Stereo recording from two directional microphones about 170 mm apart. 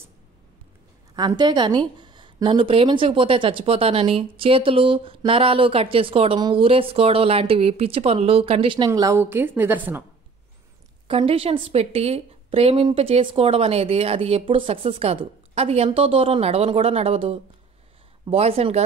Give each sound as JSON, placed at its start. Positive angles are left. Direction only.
{"t": 1.1, "sound": "speech", "side_deg": -25}
{"t": 11.1, "sound": "speech", "side_deg": -35}